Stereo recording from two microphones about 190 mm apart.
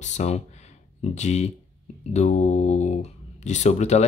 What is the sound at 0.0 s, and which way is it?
Speech, 35° left (ahead or behind).